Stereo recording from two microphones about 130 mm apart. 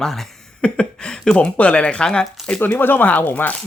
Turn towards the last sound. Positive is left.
turn(degrees=15)  # may be behind; listen again after turning